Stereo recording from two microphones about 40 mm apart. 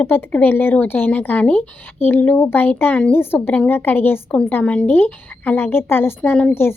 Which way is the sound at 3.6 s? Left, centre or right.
Left.